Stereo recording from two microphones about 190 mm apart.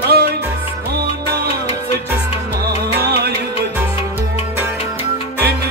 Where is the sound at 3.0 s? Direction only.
55° right (ahead or behind).